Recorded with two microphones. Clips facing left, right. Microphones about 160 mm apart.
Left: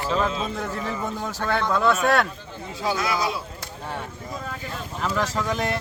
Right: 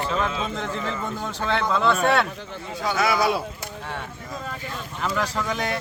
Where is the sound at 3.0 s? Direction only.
70° right (ahead or behind).